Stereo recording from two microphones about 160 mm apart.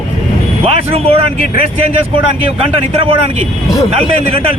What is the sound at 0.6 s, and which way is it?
Speech, 35° right (ahead or behind).